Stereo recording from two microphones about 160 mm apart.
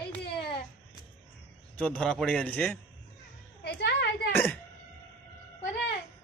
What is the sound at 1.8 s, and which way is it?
A man's voice, 5° left (ahead or behind).